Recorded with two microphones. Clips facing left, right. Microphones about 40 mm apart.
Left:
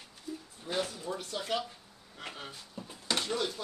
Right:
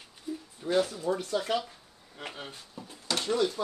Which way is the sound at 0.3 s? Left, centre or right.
Centre.